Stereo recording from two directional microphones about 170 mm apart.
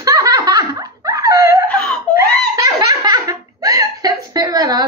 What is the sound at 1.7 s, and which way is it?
Wail, 5° left (ahead or behind).